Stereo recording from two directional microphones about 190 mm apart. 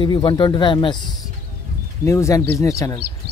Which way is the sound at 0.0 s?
25° left (ahead or behind).